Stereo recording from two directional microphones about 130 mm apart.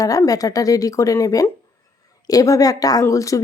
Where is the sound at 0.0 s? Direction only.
25° left (ahead or behind).